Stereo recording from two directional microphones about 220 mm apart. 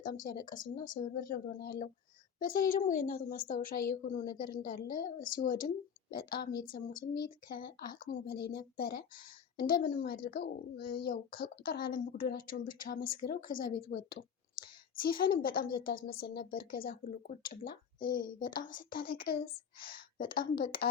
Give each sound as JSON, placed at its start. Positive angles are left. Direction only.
{"t": 0.0, "sound": "speech", "side_deg": 40}